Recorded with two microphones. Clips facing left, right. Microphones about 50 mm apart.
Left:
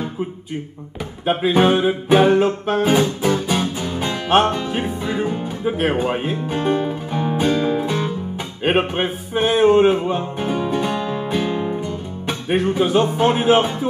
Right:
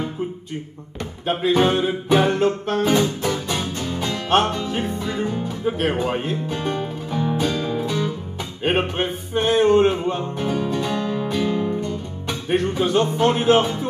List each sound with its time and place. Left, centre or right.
1.2 s music: centre
4.3 s music: centre
8.6 s music: centre
10.3 s music: left
12.4 s music: centre